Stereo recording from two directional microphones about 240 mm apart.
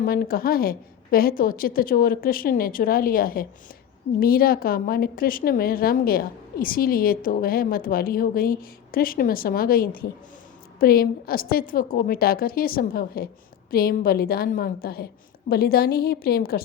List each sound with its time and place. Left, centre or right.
0.0 s a woman's voice: left